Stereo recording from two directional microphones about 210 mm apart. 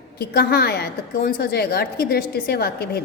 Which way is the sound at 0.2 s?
50° left (ahead or behind).